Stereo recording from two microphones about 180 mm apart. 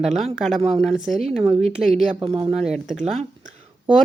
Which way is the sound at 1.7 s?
Centre (ahead or behind).